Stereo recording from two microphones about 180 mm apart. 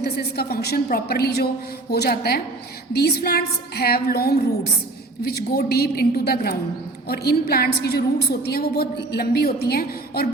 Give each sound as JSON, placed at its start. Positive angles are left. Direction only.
{"t": 0.0, "sound": "a woman's voice", "side_deg": 60}